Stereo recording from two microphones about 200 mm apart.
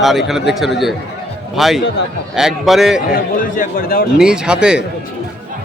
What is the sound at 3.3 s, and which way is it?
Speech, 40° left (ahead or behind).